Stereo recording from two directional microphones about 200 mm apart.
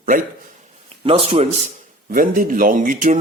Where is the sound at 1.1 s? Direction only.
30° right (ahead or behind).